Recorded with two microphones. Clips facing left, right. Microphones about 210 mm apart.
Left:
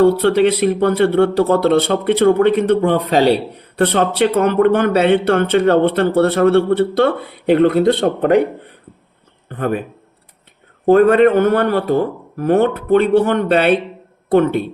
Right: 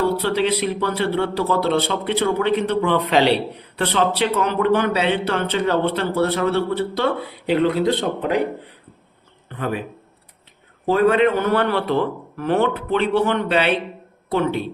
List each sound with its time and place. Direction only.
0.0 s a man's voice: 55° left (ahead or behind)
9.5 s a man's voice: 50° left (ahead or behind)
10.8 s a man's voice: 50° left (ahead or behind)